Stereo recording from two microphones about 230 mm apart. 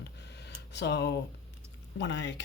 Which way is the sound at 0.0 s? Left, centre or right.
Left.